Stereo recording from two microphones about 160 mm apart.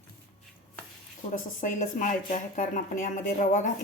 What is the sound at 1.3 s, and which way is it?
Speech, 55° left (ahead or behind).